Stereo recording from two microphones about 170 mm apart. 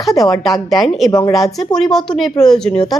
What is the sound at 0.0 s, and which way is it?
A woman's voice, centre (ahead or behind).